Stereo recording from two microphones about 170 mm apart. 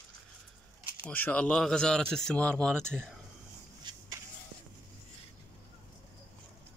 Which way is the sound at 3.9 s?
25° right (ahead or behind).